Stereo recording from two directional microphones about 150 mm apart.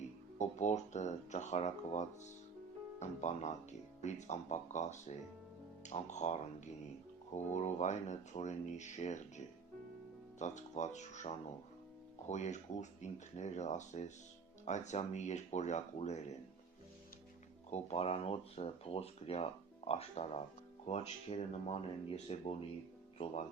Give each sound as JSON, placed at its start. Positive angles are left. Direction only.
{"t": 0.3, "sound": "speech", "side_deg": 50}
{"t": 17.7, "sound": "speech", "side_deg": 45}